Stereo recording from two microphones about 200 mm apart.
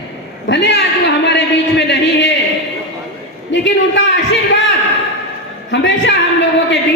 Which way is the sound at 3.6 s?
60° left (ahead or behind).